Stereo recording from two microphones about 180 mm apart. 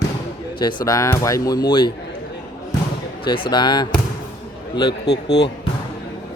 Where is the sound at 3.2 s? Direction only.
25° left (ahead or behind).